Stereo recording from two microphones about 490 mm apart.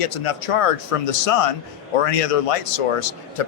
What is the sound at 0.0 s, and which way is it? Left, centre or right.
A man's voice, left.